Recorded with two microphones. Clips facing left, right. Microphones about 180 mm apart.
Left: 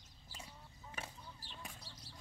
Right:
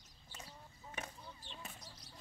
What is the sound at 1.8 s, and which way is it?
Basketball bounce, 30° left (ahead or behind).